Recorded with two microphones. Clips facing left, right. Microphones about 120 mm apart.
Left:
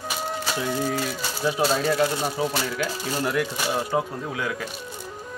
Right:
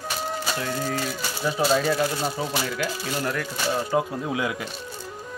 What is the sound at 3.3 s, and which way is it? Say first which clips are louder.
Speech: left 2 dB; 10° left (ahead or behind).